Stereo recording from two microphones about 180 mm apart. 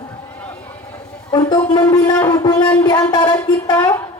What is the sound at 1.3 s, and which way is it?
A woman's voice, 25° left (ahead or behind).